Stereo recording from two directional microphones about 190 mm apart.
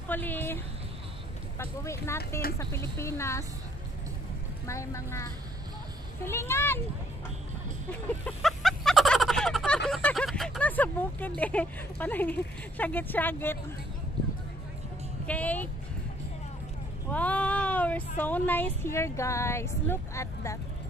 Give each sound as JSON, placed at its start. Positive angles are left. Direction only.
{"t": 0.1, "sound": "speech", "side_deg": 10}
{"t": 1.6, "sound": "speech", "side_deg": 15}
{"t": 4.6, "sound": "speech", "side_deg": 15}
{"t": 8.4, "sound": "a sound", "side_deg": 0}
{"t": 9.8, "sound": "speech", "side_deg": 0}
{"t": 15.2, "sound": "speech", "side_deg": 10}
{"t": 17.1, "sound": "speech", "side_deg": 5}